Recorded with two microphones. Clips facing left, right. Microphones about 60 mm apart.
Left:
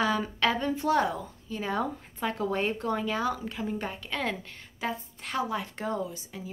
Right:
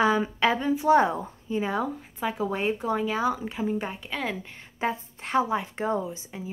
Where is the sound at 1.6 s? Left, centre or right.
Centre.